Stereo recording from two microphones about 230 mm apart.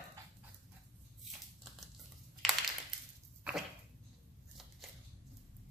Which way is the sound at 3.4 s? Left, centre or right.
Centre.